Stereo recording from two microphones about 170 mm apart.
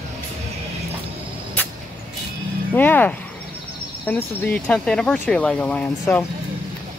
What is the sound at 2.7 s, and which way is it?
Speech, 10° left (ahead or behind).